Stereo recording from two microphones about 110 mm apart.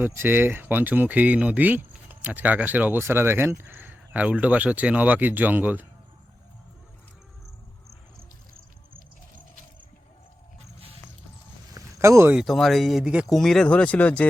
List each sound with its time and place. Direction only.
0.0 s speech: 20° right (ahead or behind)
11.7 s a sound: 25° right (ahead or behind)
12.5 s speech: centre (ahead or behind)
13.3 s speech: 5° left (ahead or behind)